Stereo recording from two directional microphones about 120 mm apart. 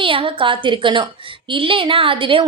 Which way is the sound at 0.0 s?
45° right (ahead or behind).